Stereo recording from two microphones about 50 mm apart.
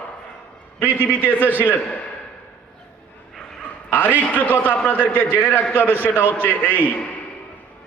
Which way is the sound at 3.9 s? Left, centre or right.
Left.